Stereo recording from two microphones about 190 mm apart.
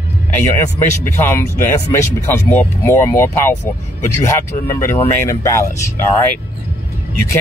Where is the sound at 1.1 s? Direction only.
10° left (ahead or behind).